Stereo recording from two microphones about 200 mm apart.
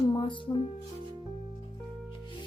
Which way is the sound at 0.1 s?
25° left (ahead or behind).